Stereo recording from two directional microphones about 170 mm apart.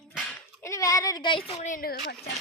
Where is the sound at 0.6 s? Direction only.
20° left (ahead or behind).